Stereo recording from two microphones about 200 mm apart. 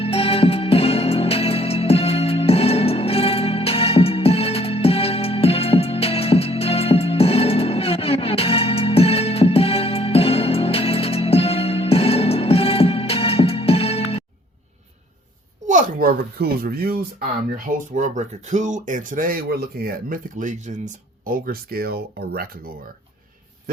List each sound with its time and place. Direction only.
0.0 s music: 30° left (ahead or behind)
15.6 s a sound: 45° right (ahead or behind)
17.7 s speech: 40° right (ahead or behind)